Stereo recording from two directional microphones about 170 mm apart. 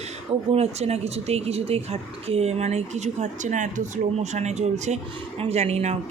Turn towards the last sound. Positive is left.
turn(degrees=-40)  # may be behind; listen again after turning